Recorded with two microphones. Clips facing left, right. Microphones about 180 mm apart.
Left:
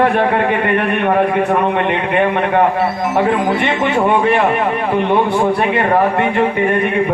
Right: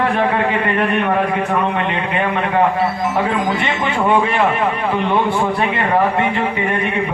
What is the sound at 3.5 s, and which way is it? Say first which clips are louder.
Speech: left 4 dB; 55° left (ahead or behind).